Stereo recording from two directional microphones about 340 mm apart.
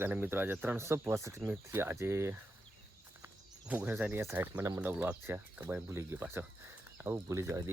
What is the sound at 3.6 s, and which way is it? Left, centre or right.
Speech, centre.